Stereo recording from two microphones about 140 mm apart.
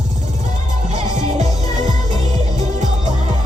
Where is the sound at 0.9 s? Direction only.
55° right (ahead or behind).